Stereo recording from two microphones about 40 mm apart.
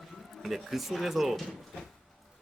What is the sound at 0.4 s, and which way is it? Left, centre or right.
Speech, centre.